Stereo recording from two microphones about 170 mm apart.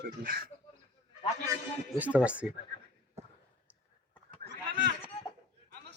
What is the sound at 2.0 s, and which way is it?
Speech, 5° right (ahead or behind).